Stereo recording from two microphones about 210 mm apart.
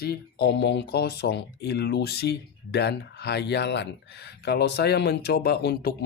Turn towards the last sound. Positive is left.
turn(degrees=50)  # may be behind; listen again after turning